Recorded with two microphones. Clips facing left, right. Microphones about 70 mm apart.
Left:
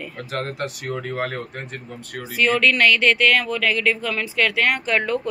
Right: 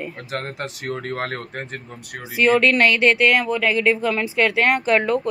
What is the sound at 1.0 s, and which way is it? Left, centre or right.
A man's voice, right.